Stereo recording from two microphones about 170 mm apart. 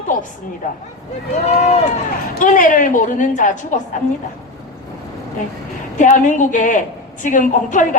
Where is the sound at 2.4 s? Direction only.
50° left (ahead or behind).